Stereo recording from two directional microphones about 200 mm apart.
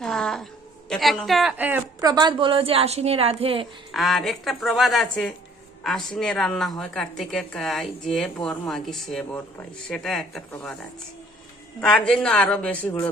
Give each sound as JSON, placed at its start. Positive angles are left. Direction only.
{"t": 0.0, "sound": "a sound", "side_deg": 5}
{"t": 0.9, "sound": "a woman's voice", "side_deg": 0}
{"t": 3.9, "sound": "a woman's voice", "side_deg": 0}
{"t": 11.8, "sound": "a woman's voice", "side_deg": 5}